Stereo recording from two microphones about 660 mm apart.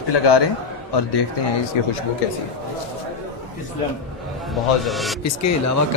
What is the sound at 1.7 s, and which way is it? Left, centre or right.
Speech, left.